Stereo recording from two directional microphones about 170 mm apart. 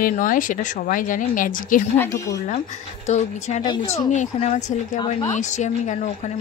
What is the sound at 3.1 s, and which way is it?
Speech, 40° left (ahead or behind).